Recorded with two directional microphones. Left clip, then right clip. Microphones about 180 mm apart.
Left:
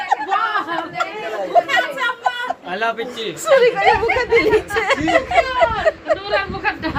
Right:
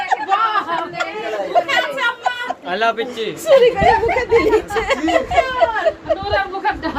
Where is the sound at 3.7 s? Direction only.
10° right (ahead or behind).